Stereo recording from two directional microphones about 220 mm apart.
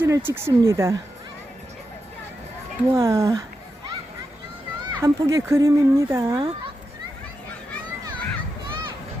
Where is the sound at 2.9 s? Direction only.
15° right (ahead or behind).